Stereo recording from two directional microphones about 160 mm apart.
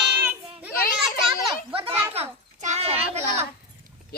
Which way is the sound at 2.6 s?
45° right (ahead or behind).